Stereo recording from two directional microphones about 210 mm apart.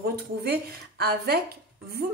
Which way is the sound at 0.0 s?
50° right (ahead or behind).